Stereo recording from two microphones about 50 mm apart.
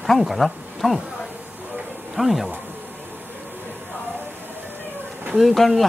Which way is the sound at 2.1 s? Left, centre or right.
Centre.